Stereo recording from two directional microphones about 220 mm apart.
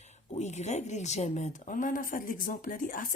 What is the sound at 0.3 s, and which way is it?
A woman's voice, 30° left (ahead or behind).